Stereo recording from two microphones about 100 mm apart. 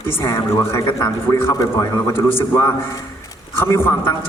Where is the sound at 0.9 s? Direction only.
35° left (ahead or behind).